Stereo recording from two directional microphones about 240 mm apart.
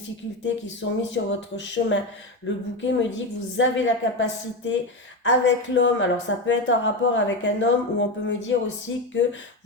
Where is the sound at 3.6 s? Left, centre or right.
Left.